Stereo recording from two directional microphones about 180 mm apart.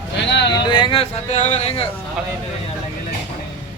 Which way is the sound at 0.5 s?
25° left (ahead or behind).